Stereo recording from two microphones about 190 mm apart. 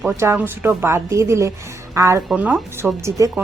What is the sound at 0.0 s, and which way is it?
A woman's voice, 10° right (ahead or behind).